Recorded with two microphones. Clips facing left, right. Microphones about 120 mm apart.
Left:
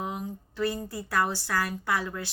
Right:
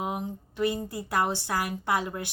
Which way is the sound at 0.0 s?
20° right (ahead or behind).